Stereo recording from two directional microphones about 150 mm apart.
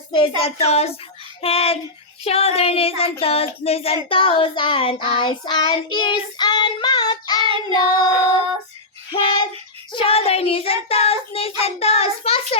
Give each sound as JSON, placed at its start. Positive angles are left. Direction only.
{"t": 0.1, "sound": "speech", "side_deg": 40}
{"t": 4.1, "sound": "child singing", "side_deg": 35}
{"t": 7.8, "sound": "music", "side_deg": 25}
{"t": 9.9, "sound": "speech", "side_deg": 40}